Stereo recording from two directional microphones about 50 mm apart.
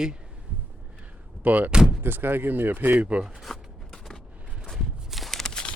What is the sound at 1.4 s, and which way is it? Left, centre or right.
Speech, right.